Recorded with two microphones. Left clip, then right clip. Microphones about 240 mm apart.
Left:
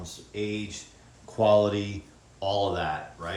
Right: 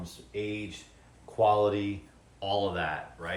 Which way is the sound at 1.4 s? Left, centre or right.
Left.